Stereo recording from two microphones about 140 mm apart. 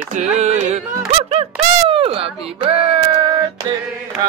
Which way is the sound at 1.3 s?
40° right (ahead or behind).